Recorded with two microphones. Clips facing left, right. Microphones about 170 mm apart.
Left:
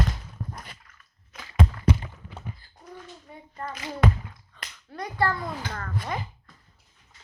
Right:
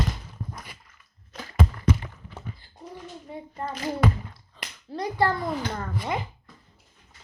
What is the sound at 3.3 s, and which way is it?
Speech, 30° right (ahead or behind).